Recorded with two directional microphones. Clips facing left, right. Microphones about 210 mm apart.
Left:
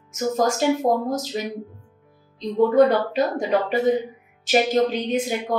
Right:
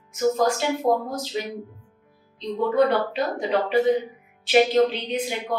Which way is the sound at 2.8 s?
45° left (ahead or behind).